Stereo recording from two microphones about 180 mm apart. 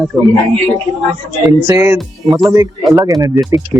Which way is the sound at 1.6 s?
15° right (ahead or behind).